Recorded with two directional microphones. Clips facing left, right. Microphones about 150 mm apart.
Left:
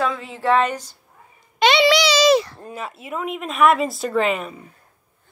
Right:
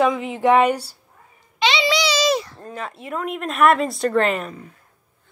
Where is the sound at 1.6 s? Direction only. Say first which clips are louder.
Left 4 dB; 60° left (ahead or behind); by 2.5 s 90° left.